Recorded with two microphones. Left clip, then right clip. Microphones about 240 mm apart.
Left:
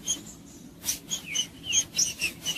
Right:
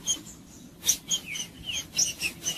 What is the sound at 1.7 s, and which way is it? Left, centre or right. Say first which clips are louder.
Bird: left 1 dB; centre.